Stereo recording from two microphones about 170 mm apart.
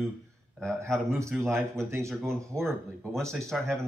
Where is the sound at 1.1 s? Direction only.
15° right (ahead or behind).